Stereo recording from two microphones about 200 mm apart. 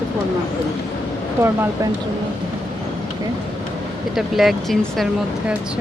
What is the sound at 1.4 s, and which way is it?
Speech, 10° right (ahead or behind).